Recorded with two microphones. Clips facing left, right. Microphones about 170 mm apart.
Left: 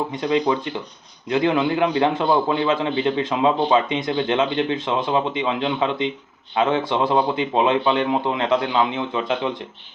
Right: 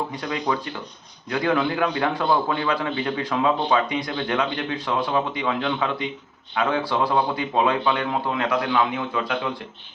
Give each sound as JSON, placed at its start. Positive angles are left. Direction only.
{"t": 0.2, "sound": "a man's voice", "side_deg": 25}